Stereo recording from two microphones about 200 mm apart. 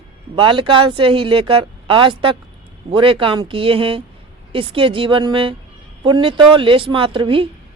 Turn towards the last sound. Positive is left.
turn(degrees=-25)  # may be behind; listen again after turning